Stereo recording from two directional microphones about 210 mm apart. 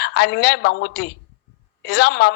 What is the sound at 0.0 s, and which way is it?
A woman's voice, 50° left (ahead or behind).